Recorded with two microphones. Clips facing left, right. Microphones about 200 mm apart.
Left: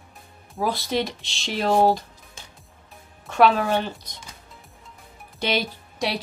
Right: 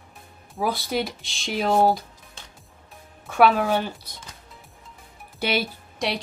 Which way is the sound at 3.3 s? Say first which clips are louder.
Even; 5° right (ahead or behind).